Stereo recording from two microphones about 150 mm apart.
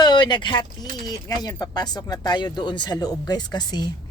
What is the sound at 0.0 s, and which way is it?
A woman's voice, 30° left (ahead or behind).